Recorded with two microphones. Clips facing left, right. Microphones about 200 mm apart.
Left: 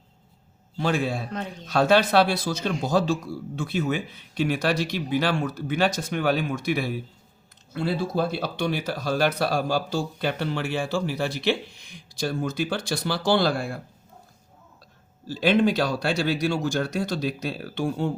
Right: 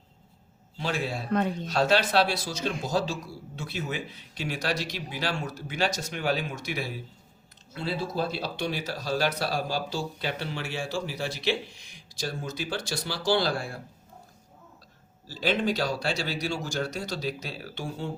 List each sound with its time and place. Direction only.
0.8 s a man's voice: 50° left (ahead or behind)
15.3 s speech: 60° left (ahead or behind)